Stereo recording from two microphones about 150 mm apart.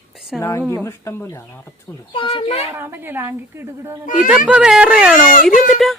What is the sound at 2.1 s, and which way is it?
Speech, 35° left (ahead or behind).